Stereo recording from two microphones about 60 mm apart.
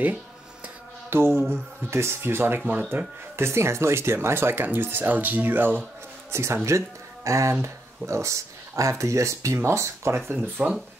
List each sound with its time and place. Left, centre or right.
1.1 s speech: right
2.6 s speech: right
3.3 s speech: right
6.3 s speech: right
10.1 s speech: right